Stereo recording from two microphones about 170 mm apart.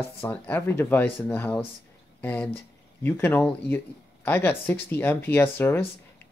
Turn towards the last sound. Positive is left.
turn(degrees=10)  # may be behind; listen again after turning